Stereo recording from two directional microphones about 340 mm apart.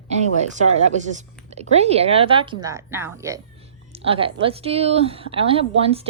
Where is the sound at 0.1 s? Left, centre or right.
Right.